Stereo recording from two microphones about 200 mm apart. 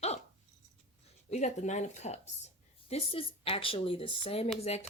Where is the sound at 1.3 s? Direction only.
35° left (ahead or behind).